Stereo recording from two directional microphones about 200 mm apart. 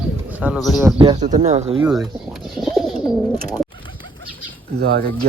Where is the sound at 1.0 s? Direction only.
25° right (ahead or behind).